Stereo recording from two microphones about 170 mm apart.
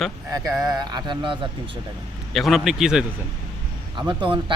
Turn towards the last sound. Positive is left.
turn(degrees=-30)  # may be behind; listen again after turning